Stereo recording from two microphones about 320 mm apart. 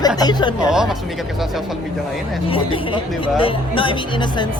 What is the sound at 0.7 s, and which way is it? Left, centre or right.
Speech, centre.